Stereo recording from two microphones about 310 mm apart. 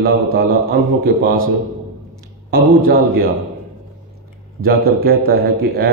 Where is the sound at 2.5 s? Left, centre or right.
Right.